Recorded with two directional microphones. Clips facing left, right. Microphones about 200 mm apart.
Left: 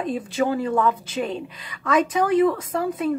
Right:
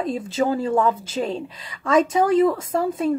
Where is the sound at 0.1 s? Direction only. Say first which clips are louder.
Left 1 dB; 25° right (ahead or behind).